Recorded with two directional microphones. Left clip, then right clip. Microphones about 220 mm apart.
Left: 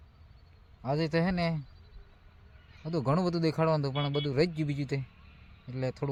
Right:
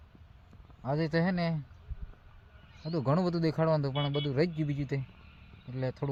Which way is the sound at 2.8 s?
5° left (ahead or behind).